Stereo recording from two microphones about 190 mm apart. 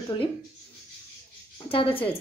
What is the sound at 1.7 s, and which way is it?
Speech, 30° left (ahead or behind).